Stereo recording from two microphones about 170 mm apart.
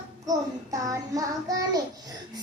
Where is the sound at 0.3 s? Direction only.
20° right (ahead or behind).